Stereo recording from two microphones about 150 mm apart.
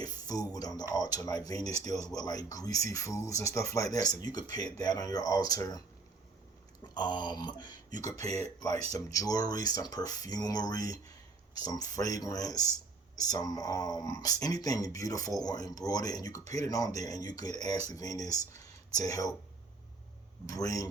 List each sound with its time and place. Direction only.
0.0 s speech: 25° left (ahead or behind)
6.8 s speech: 30° left (ahead or behind)
20.5 s speech: 25° left (ahead or behind)